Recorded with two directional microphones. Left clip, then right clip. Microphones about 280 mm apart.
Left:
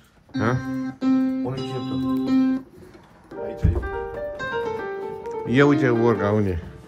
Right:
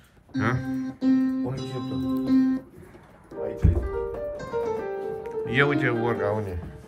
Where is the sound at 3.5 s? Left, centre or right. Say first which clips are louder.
Left 3 dB; centre.